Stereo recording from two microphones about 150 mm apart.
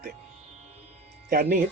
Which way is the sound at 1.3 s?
90° right.